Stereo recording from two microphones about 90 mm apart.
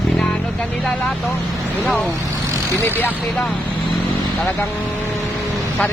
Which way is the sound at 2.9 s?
20° left (ahead or behind).